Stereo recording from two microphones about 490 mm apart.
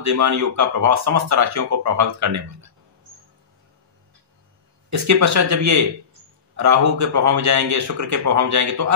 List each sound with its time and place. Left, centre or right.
0.0 s speech: right
4.8 s speech: right